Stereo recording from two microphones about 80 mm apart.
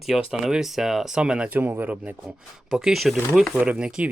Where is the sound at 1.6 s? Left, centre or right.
Right.